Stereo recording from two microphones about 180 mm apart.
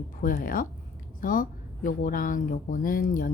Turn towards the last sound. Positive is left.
turn(degrees=50)  # may be behind; listen again after turning